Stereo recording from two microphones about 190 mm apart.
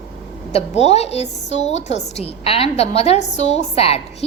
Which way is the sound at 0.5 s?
35° left (ahead or behind).